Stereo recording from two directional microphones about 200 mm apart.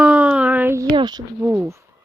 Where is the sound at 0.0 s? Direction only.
5° right (ahead or behind); by 1.2 s 20° right (ahead or behind).